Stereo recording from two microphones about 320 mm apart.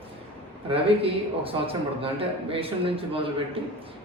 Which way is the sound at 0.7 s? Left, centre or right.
Centre.